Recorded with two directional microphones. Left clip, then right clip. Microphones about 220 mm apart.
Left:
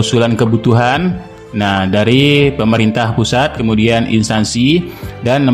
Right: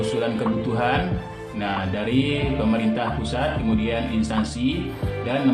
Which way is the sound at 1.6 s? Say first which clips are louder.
Left 13 dB; 50° left (ahead or behind).